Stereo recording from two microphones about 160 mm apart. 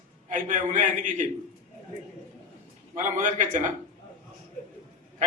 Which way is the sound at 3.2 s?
55° right (ahead or behind).